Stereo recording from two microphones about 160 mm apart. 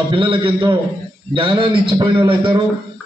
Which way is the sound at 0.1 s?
30° right (ahead or behind).